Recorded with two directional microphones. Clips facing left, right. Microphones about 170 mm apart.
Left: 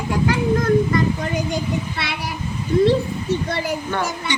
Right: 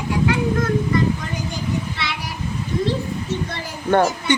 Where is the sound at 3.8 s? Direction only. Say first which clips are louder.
Right 7 dB; 50° right (ahead or behind).